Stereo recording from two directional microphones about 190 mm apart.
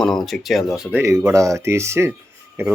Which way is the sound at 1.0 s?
15° right (ahead or behind).